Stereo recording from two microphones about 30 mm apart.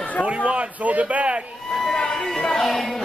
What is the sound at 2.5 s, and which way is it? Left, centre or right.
Music, centre.